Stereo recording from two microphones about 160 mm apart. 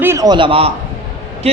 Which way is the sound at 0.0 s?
20° right (ahead or behind).